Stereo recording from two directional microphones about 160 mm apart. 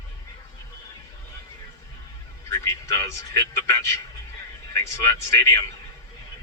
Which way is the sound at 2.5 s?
20° left (ahead or behind).